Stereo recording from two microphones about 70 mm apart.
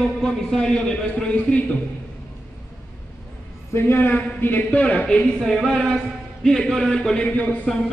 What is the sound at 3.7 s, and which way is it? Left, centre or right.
A man's voice, left.